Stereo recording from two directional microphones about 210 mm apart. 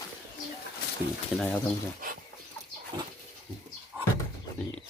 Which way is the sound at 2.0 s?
45° right (ahead or behind).